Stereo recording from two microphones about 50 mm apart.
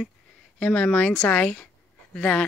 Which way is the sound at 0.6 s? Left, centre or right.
Left.